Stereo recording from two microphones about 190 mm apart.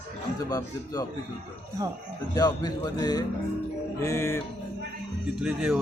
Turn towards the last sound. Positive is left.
turn(degrees=0)  # may be behind; listen again after turning